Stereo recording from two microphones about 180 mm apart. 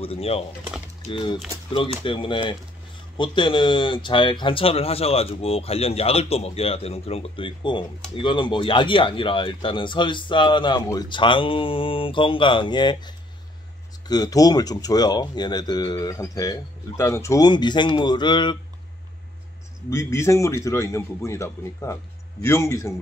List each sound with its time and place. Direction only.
0.0 s speech: 35° left (ahead or behind)
19.9 s a man's voice: 15° left (ahead or behind)